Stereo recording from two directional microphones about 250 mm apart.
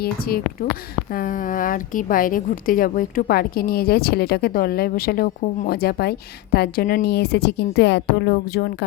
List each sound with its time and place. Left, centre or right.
0.0 s a woman's voice: left